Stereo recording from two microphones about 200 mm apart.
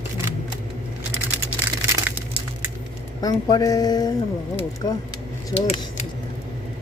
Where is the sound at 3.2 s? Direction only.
20° left (ahead or behind).